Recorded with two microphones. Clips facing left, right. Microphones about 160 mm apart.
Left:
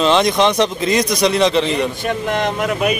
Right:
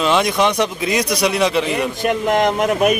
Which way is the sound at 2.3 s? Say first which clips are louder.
Right 4 dB; 45° right (ahead or behind).